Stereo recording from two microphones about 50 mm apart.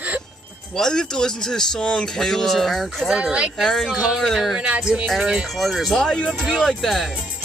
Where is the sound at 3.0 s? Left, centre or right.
Centre.